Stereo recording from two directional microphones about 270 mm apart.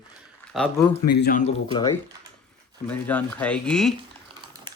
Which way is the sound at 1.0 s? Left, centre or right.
Left.